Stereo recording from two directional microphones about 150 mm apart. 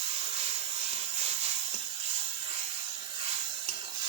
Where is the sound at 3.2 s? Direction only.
35° right (ahead or behind).